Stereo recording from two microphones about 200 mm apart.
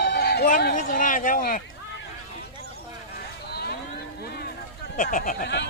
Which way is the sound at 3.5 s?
55° left (ahead or behind).